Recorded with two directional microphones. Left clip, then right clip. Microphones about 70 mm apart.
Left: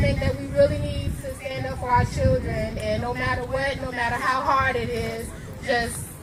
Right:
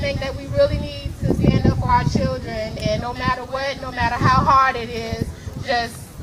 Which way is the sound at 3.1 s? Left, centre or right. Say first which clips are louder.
Right 4 dB; right.